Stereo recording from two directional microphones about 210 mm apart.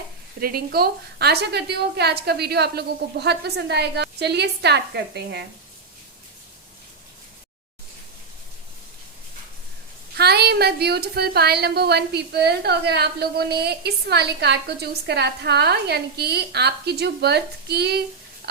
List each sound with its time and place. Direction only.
0.3 s speech: 45° right (ahead or behind)
10.2 s speech: 50° right (ahead or behind)